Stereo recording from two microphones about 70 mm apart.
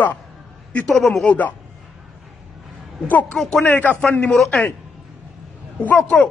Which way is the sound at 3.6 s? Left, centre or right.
Left.